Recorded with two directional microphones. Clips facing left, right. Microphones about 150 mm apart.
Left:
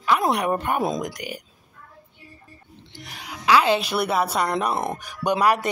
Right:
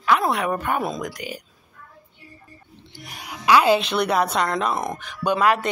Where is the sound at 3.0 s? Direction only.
10° right (ahead or behind).